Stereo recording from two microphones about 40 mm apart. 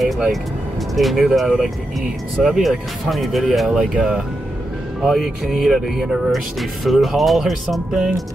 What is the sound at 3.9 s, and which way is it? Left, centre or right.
Speech, right.